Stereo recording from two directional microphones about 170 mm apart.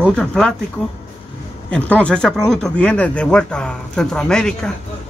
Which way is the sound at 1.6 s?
10° left (ahead or behind).